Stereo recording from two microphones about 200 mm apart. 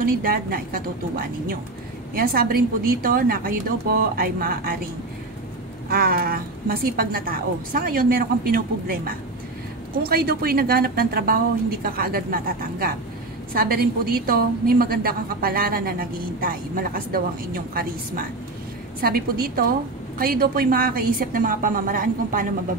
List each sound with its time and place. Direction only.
0.0 s a woman's voice: 45° right (ahead or behind)
5.9 s a woman's voice: 45° right (ahead or behind)
18.9 s a woman's voice: 50° right (ahead or behind)